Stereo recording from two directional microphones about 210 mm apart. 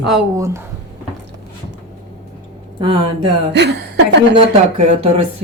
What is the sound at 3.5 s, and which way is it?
Speech, 55° right (ahead or behind).